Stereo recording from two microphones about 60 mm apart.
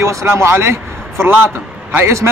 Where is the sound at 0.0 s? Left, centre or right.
Right.